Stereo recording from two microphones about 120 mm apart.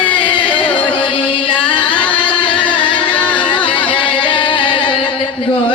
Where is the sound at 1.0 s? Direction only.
45° left (ahead or behind).